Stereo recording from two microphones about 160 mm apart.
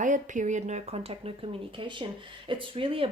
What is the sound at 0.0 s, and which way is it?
Speech, 50° right (ahead or behind).